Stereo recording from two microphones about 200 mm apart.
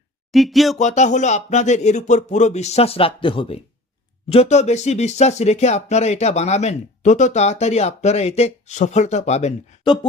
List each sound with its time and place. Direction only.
0.3 s speech: centre (ahead or behind)
0.8 s speech: 35° left (ahead or behind)